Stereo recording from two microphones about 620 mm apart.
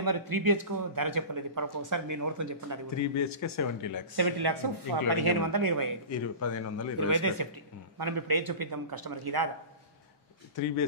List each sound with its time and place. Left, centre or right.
0.0 s a man's voice: right
3.0 s a man's voice: left
4.2 s speech: right
6.0 s a man's voice: left
7.0 s speech: right